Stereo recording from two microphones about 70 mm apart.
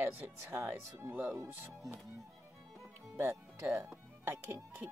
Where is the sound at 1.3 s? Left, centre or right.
Right.